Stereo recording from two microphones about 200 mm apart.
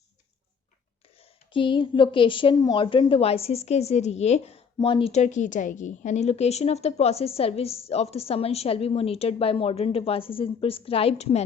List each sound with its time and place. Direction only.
1.5 s a woman's voice: 25° left (ahead or behind)